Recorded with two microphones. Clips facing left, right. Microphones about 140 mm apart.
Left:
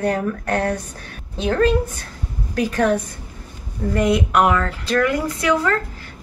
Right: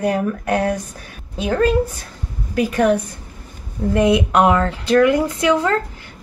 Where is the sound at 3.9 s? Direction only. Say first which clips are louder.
Right 2 dB; 20° right (ahead or behind).